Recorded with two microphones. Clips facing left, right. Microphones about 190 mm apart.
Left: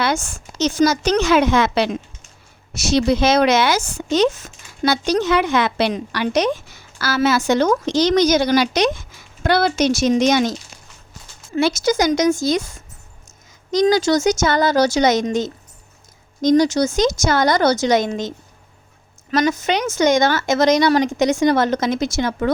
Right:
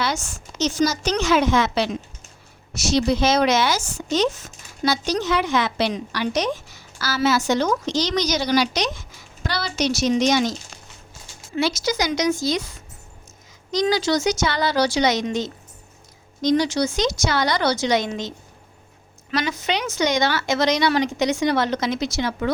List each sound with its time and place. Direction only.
0.0 s a woman's voice: 55° left (ahead or behind)
11.5 s a woman's voice: 50° left (ahead or behind)